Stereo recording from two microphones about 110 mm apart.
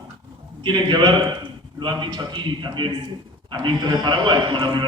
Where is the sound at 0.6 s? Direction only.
40° right (ahead or behind).